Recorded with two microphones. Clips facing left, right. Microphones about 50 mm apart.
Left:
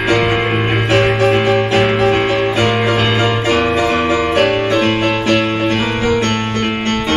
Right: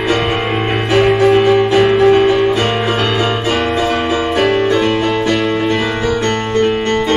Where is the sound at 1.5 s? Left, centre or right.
Left.